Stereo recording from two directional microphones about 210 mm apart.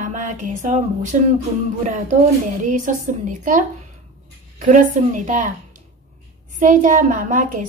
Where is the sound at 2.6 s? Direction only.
35° right (ahead or behind).